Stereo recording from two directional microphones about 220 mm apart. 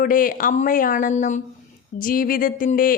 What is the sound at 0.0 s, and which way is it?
Speech, 40° left (ahead or behind).